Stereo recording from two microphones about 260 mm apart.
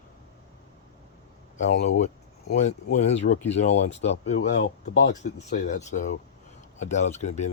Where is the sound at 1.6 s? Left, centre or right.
Left.